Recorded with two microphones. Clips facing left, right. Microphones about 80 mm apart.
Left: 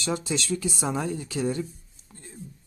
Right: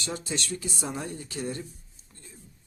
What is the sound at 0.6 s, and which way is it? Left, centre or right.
Speech, left.